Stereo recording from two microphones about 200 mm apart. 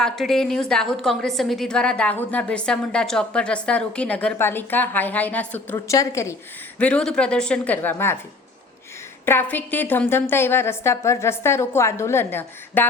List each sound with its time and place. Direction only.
0.0 s a woman's voice: centre (ahead or behind)
9.2 s a woman's voice: 10° left (ahead or behind)